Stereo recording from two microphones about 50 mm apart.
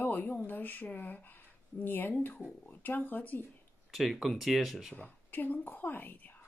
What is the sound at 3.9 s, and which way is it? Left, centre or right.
Speech, centre.